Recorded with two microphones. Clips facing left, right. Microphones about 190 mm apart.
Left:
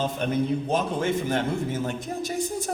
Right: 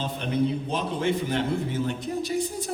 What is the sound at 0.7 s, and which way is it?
A man's voice, 45° left (ahead or behind).